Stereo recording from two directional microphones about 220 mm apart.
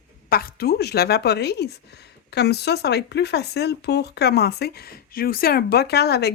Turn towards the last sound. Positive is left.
turn(degrees=50)  # may be behind; listen again after turning